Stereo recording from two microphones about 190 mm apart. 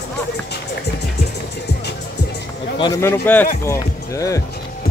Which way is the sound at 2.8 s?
15° left (ahead or behind).